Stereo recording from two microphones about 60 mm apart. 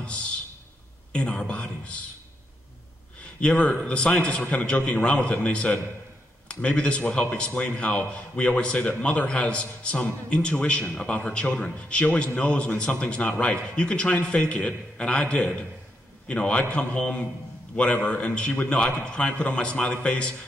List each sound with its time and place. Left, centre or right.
1.1 s a man's voice: centre
3.3 s a man's voice: centre